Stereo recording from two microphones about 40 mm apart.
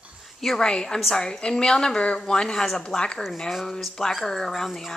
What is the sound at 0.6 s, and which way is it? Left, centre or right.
A woman's voice, centre.